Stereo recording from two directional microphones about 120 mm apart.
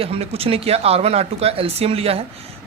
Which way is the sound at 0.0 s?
55° right (ahead or behind).